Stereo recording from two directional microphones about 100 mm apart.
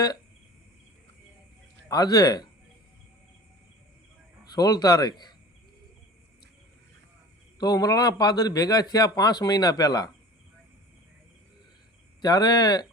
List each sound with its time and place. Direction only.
1.9 s a man's voice: 40° left (ahead or behind)
4.5 s a man's voice: 40° left (ahead or behind)
7.6 s a man's voice: 40° left (ahead or behind)
12.2 s a man's voice: 40° left (ahead or behind)